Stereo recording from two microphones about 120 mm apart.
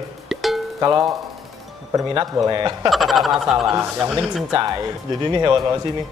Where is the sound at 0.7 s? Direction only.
30° right (ahead or behind).